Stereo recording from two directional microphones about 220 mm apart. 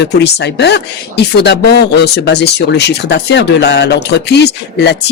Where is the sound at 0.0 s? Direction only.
50° left (ahead or behind).